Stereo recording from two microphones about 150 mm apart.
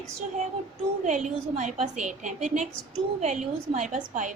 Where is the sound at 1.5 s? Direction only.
55° right (ahead or behind).